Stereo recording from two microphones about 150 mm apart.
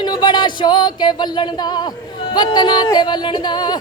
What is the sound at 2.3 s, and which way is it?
Music, 30° left (ahead or behind).